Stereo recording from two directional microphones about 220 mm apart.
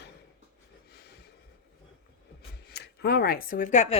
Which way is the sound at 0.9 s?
45° left (ahead or behind).